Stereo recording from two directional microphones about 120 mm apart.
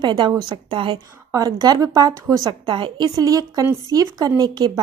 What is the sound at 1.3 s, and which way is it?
A woman's voice, 35° right (ahead or behind).